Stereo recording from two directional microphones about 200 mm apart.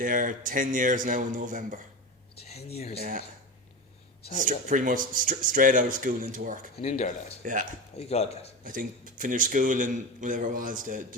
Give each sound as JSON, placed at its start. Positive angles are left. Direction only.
{"t": 0.0, "sound": "a man's voice", "side_deg": -40}
{"t": 2.4, "sound": "speech", "side_deg": 30}
{"t": 3.0, "sound": "a man's voice", "side_deg": -40}
{"t": 4.4, "sound": "a man's voice", "side_deg": -40}
{"t": 6.7, "sound": "speech", "side_deg": 30}
{"t": 7.4, "sound": "a man's voice", "side_deg": -40}
{"t": 7.9, "sound": "speech", "side_deg": 30}
{"t": 8.6, "sound": "a man's voice", "side_deg": -45}